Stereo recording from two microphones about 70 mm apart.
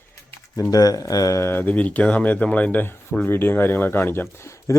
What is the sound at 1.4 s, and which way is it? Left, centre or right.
Speech, left.